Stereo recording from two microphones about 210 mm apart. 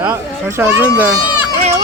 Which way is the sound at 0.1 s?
10° right (ahead or behind).